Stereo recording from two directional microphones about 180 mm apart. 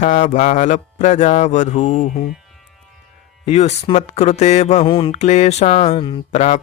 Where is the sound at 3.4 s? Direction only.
35° left (ahead or behind).